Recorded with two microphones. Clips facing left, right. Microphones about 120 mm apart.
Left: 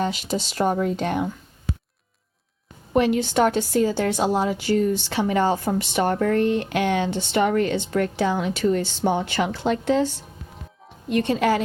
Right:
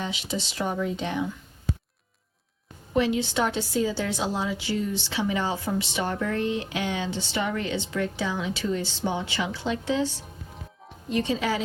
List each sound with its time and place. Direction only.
0.0 s speech: 45° left (ahead or behind)
2.9 s a woman's voice: 55° left (ahead or behind)